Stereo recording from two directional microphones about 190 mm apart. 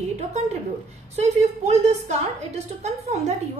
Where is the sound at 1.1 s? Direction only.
35° right (ahead or behind).